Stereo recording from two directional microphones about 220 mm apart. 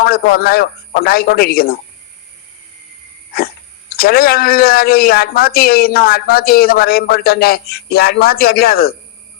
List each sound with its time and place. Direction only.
0.0 s speech: 45° left (ahead or behind)
3.3 s speech: 45° left (ahead or behind)